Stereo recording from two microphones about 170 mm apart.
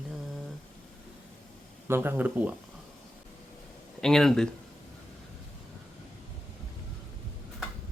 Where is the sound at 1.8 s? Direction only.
15° right (ahead or behind).